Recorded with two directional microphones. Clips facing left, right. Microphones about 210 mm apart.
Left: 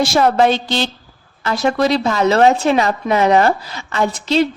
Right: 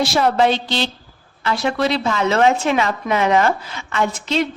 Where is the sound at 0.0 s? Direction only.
45° left (ahead or behind).